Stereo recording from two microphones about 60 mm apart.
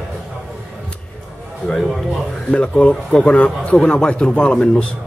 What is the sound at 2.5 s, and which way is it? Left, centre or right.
Speech, centre.